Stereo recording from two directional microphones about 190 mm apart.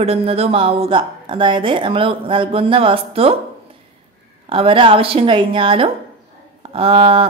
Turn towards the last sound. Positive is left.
turn(degrees=-30)  # may be behind; listen again after turning